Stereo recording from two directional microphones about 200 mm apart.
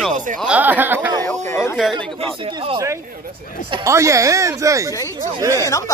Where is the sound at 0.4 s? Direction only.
5° right (ahead or behind).